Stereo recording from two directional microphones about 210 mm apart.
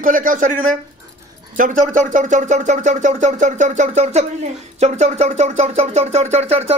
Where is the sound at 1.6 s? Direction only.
40° right (ahead or behind).